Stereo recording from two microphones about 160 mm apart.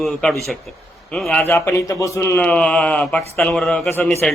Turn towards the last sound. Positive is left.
turn(degrees=5)  # may be behind; listen again after turning